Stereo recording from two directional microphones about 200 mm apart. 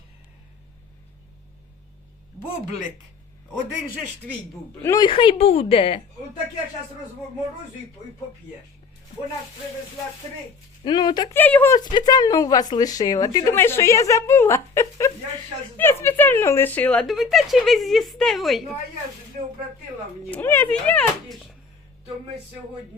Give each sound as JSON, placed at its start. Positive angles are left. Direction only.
{"t": 4.8, "sound": "speech", "side_deg": 15}
{"t": 10.8, "sound": "speech", "side_deg": 20}
{"t": 11.3, "sound": "speech", "side_deg": 10}
{"t": 20.3, "sound": "speech", "side_deg": 10}